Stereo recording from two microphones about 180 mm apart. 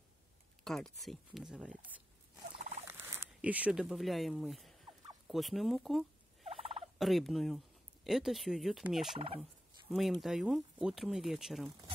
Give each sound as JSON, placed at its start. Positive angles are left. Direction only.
{"t": 0.7, "sound": "speech", "side_deg": 0}
{"t": 2.9, "sound": "speech", "side_deg": -15}
{"t": 6.4, "sound": "fowl", "side_deg": -35}
{"t": 7.0, "sound": "speech", "side_deg": 0}